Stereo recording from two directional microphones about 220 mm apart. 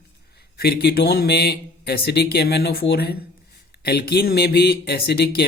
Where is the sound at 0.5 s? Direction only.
45° left (ahead or behind).